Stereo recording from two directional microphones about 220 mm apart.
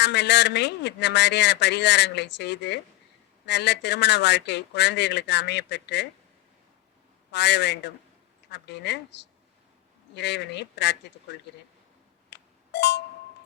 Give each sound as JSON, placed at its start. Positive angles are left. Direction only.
{"t": 0.0, "sound": "a man's voice", "side_deg": 50}
{"t": 7.3, "sound": "a man's voice", "side_deg": 50}
{"t": 10.2, "sound": "a man's voice", "side_deg": 50}
{"t": 12.3, "sound": "music", "side_deg": 50}